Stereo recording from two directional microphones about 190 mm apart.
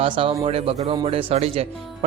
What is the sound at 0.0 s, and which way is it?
Speech, 30° right (ahead or behind).